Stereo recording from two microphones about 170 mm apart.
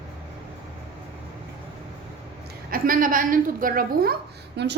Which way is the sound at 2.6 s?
55° right (ahead or behind).